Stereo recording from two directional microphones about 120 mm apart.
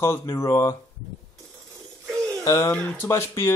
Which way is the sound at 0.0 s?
25° left (ahead or behind).